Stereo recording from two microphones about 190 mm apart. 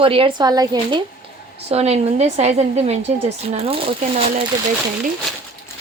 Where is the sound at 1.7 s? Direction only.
35° right (ahead or behind).